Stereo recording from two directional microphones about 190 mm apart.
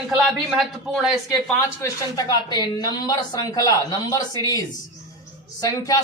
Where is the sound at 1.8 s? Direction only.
20° left (ahead or behind).